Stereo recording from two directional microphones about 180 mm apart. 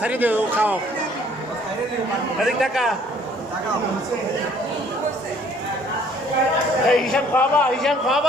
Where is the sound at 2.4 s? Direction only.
Centre (ahead or behind).